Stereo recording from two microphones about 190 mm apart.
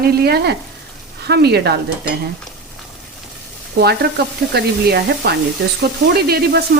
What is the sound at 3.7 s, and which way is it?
Speech, 60° right (ahead or behind).